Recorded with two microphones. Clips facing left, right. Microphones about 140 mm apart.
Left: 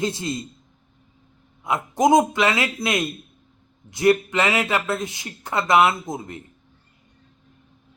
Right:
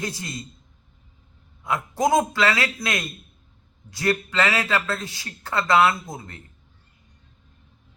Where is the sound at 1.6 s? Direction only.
20° left (ahead or behind).